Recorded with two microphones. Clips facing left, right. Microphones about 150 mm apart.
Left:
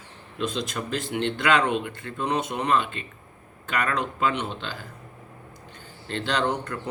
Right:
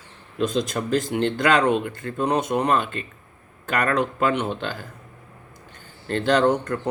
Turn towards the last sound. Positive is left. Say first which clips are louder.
# right 7 dB
turn(degrees=-45)  # may be behind; listen again after turning